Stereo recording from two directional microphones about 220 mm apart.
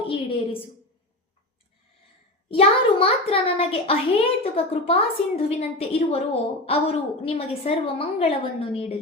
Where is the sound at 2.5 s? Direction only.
25° left (ahead or behind).